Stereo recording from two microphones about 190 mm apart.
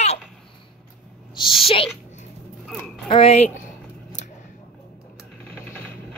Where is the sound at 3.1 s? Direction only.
30° left (ahead or behind).